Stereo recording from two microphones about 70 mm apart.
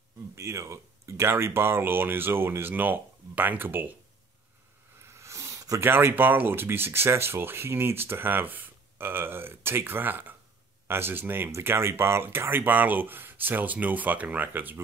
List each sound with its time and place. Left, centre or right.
0.4 s speech: right
5.0 s a sound: right
5.8 s speech: right